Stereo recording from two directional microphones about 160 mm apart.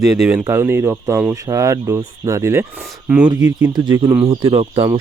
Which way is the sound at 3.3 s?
20° right (ahead or behind).